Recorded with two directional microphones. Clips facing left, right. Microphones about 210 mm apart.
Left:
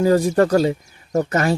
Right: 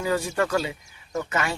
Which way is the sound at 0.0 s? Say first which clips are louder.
Left 10 dB; 40° left (ahead or behind).